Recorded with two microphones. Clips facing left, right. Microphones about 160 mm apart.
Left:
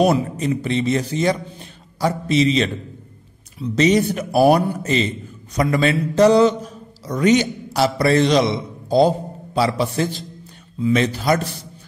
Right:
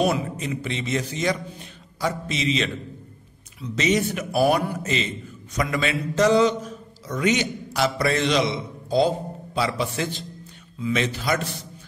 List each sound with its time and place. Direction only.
0.0 s a man's voice: 35° left (ahead or behind)